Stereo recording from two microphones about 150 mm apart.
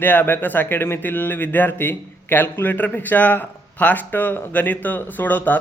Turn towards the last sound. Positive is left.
turn(degrees=10)  # may be behind; listen again after turning